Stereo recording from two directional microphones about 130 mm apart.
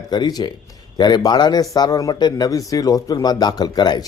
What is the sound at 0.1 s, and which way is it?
A man's voice, 30° left (ahead or behind).